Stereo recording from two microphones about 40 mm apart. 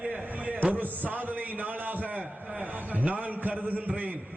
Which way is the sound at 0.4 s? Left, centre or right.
Right.